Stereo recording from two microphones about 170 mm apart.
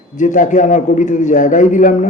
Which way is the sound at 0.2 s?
50° left (ahead or behind).